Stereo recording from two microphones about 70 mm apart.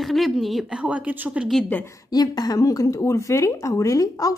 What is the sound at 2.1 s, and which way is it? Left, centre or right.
A woman's voice, left.